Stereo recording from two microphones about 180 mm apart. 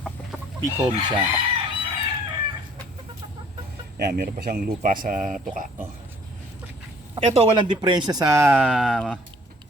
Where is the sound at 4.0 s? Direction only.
55° right (ahead or behind).